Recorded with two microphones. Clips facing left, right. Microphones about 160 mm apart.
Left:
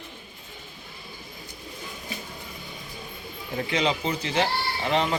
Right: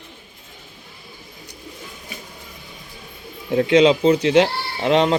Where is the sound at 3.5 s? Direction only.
75° right (ahead or behind).